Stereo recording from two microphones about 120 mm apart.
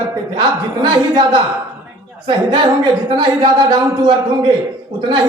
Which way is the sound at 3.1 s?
40° right (ahead or behind).